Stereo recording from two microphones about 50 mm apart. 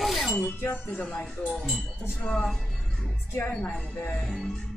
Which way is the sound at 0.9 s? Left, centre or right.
Left.